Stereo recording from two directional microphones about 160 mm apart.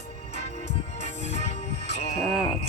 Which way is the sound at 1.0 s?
40° left (ahead or behind).